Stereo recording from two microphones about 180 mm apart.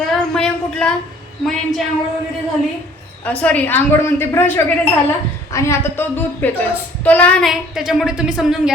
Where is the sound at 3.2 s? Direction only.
10° left (ahead or behind).